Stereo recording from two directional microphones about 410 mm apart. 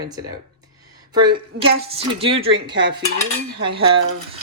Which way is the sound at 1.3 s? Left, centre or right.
Centre.